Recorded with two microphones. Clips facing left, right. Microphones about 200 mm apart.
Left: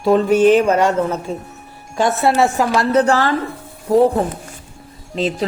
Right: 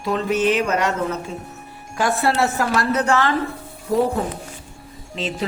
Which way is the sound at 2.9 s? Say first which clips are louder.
Left 5 dB; 30° left (ahead or behind).